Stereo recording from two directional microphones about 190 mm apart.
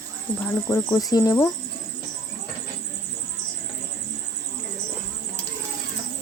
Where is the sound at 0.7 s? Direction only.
15° left (ahead or behind).